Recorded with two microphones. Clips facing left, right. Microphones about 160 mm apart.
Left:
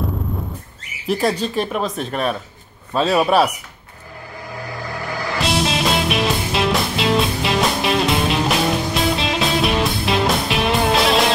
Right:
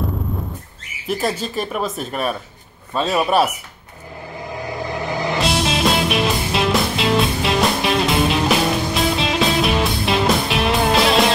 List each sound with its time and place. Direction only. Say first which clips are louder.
1.0 s speech: left 3 dB; centre (ahead or behind)
4.9 s music: right 3 dB; 20° right (ahead or behind)
5.4 s music: left 1 dB; centre (ahead or behind)